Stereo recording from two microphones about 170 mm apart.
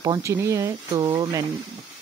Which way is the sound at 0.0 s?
20° right (ahead or behind).